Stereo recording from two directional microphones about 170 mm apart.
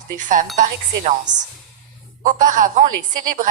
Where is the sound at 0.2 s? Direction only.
50° right (ahead or behind).